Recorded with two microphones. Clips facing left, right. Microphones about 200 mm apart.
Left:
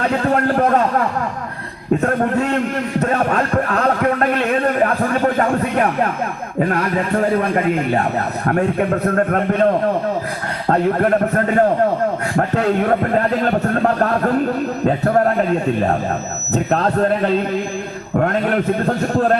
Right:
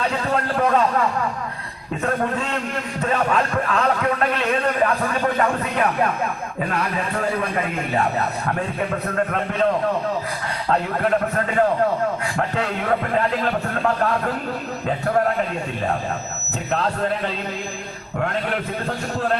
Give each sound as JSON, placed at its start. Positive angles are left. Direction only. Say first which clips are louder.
{"t": 0.1, "sound": "a man's voice", "louder": "left 6 dB", "side_deg": 50}
{"t": 2.0, "sound": "a man's voice", "louder": "left 3 dB", "side_deg": 50}
{"t": 8.4, "sound": "a man's voice", "louder": "left 7 dB", "side_deg": 55}
{"t": 10.7, "sound": "a man's voice", "louder": "left 5 dB", "side_deg": 50}
{"t": 16.5, "sound": "a man's voice", "louder": "left 6 dB", "side_deg": 40}